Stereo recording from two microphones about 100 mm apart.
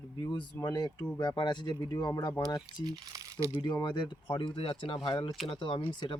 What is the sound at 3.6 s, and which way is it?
Speech, 50° left (ahead or behind).